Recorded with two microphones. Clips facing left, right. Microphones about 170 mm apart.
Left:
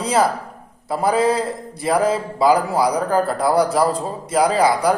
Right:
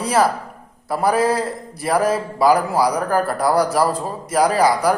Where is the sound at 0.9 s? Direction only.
25° left (ahead or behind).